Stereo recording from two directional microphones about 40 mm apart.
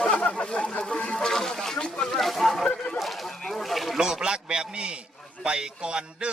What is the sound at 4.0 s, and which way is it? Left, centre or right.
A man's voice, centre.